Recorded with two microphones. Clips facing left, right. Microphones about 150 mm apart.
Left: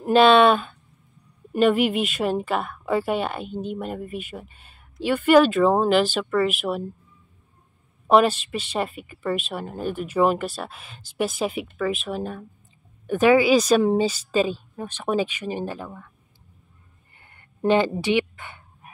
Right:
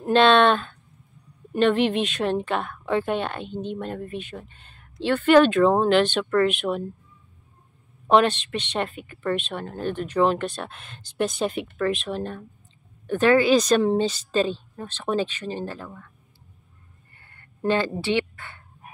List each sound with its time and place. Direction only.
0.0 s a woman's voice: 5° left (ahead or behind)
8.1 s a woman's voice: 5° left (ahead or behind)
17.2 s a sound: 15° left (ahead or behind)
17.9 s a woman's voice: 15° left (ahead or behind)